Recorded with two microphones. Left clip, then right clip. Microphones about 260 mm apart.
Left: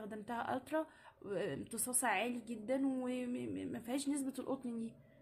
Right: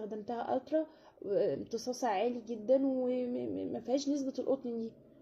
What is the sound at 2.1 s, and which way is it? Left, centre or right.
A woman's voice, left.